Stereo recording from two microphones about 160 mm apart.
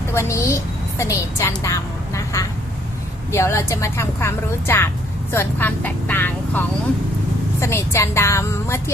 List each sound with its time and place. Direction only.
0.1 s a woman's voice: 15° left (ahead or behind)